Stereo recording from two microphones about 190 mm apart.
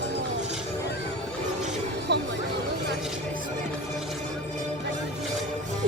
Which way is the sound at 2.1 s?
65° right (ahead or behind).